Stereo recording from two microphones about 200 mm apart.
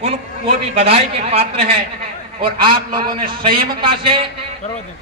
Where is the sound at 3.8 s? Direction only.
25° right (ahead or behind).